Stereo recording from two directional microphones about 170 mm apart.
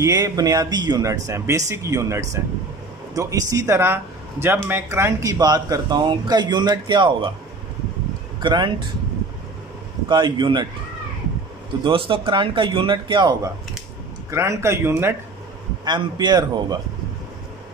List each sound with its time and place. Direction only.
0.0 s speech: 20° right (ahead or behind)
8.4 s speech: 25° right (ahead or behind)
10.0 s speech: 25° right (ahead or behind)
11.8 s a man's voice: 30° right (ahead or behind); by 15.1 s 15° right (ahead or behind)
15.8 s speech: 25° right (ahead or behind)